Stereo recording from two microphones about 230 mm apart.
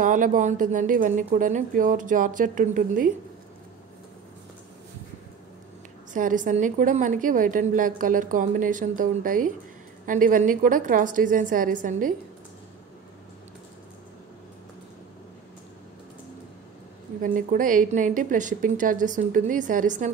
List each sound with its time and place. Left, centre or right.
0.0 s a woman's voice: right
6.1 s a woman's voice: right
17.2 s a woman's voice: right